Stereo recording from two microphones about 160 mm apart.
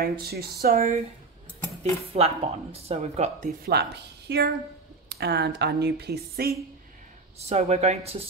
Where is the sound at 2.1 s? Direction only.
40° right (ahead or behind).